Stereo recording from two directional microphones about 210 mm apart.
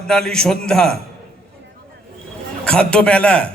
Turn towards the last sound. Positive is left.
turn(degrees=5)  # may be behind; listen again after turning